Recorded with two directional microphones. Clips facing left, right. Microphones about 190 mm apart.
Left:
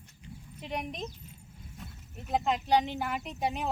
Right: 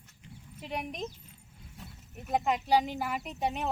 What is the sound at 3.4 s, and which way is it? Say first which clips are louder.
Speech: even; 10° left (ahead or behind).